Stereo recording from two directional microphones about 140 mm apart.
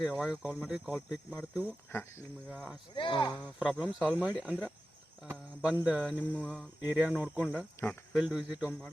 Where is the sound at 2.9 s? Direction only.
35° left (ahead or behind).